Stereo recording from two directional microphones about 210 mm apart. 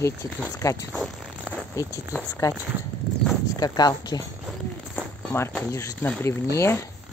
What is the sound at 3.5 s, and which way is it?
Speech, 20° left (ahead or behind).